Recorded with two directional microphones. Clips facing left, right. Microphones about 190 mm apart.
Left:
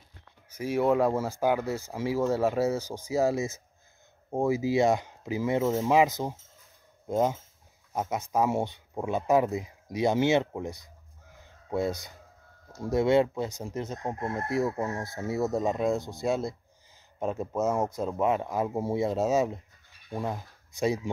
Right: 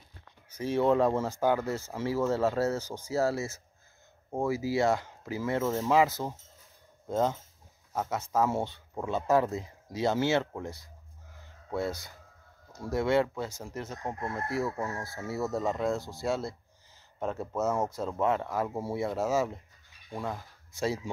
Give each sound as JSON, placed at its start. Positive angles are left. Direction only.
{"t": 0.6, "sound": "speech", "side_deg": 10}